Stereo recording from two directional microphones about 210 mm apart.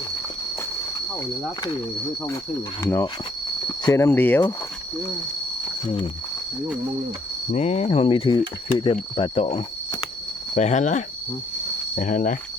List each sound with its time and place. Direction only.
2.8 s speech: 10° left (ahead or behind)
7.5 s speech: 30° left (ahead or behind)